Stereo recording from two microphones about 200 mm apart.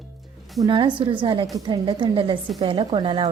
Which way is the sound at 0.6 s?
25° right (ahead or behind).